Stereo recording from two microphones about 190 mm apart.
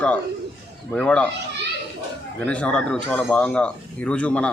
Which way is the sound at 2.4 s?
5° left (ahead or behind).